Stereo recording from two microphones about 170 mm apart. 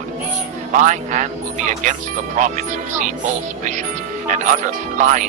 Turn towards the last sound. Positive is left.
turn(degrees=-45)  # may be behind; listen again after turning